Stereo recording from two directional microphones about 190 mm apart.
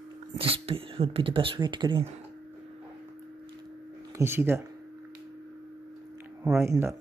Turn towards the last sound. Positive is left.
turn(degrees=-15)  # may be behind; listen again after turning